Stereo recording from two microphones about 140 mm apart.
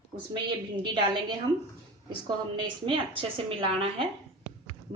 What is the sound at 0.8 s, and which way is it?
Speech, 35° right (ahead or behind).